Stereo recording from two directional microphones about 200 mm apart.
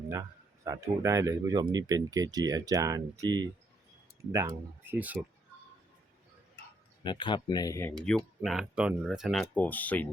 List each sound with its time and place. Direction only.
0.1 s speech: 15° right (ahead or behind)
7.0 s speech: 25° left (ahead or behind)
7.9 s speech: 5° left (ahead or behind)